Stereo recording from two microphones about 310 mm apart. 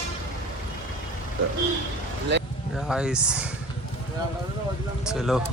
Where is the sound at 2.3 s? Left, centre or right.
Right.